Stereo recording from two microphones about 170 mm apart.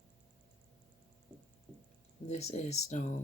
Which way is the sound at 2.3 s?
40° left (ahead or behind).